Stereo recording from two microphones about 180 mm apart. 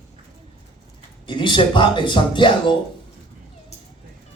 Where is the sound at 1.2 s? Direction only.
25° left (ahead or behind).